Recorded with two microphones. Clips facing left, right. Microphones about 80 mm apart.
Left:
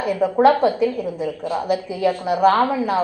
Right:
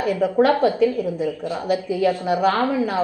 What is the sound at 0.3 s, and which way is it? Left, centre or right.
A woman's voice, centre.